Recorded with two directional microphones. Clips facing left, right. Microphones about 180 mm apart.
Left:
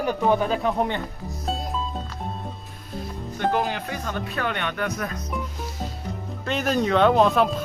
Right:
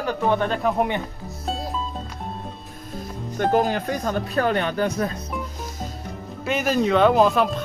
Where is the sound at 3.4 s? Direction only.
45° right (ahead or behind).